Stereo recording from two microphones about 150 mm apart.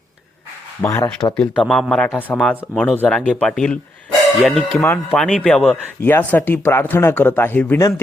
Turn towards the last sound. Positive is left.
turn(degrees=15)  # may be behind; listen again after turning